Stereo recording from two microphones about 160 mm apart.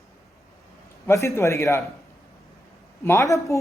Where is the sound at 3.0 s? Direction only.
15° left (ahead or behind).